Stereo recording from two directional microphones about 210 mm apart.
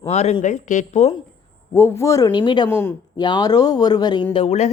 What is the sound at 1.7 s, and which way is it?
Speech, 10° left (ahead or behind).